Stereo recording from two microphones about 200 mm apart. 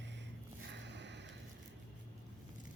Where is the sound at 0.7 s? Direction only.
60° right (ahead or behind).